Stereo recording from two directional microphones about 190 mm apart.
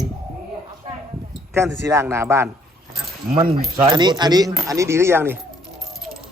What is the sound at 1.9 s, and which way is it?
Speech, 15° right (ahead or behind).